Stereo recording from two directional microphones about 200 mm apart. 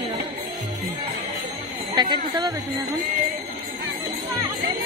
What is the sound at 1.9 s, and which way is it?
Speech, 20° right (ahead or behind).